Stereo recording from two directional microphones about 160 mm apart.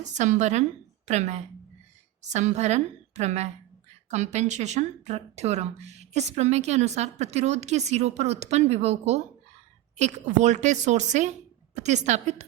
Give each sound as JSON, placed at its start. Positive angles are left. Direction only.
{"t": 0.1, "sound": "speech", "side_deg": -45}